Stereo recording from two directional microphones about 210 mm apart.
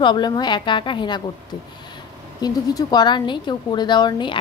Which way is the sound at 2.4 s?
20° left (ahead or behind).